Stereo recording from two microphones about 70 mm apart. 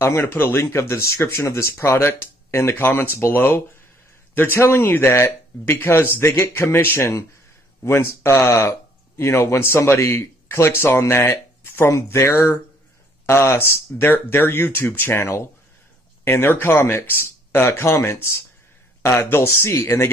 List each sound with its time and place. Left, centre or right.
0.0 s speech: left